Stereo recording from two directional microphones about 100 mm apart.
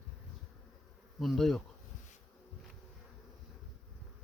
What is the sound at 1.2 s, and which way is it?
Speech, centre (ahead or behind).